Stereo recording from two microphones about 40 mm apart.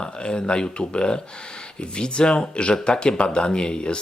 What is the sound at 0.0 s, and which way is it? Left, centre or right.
Speech, left.